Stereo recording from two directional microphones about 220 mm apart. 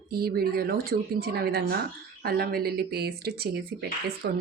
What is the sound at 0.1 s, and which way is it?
Speech, 45° right (ahead or behind).